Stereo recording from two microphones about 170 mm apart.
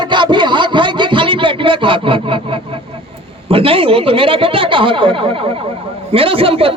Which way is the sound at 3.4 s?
35° right (ahead or behind).